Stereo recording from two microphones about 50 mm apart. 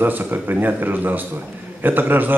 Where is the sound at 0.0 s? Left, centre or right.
Right.